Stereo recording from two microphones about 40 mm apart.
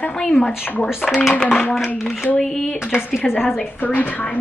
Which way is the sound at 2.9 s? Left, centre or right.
Centre.